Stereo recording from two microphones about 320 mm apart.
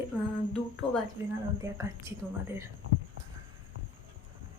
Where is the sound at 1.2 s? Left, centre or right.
Centre.